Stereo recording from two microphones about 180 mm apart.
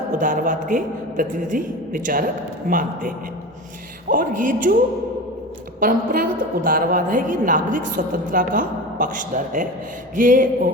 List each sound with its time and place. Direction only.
0.1 s a woman's voice: 50° right (ahead or behind)
4.1 s a woman's voice: 50° right (ahead or behind)
5.8 s a woman's voice: 50° right (ahead or behind)